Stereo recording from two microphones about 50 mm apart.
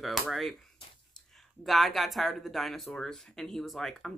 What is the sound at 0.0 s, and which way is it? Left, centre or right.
Speech, centre.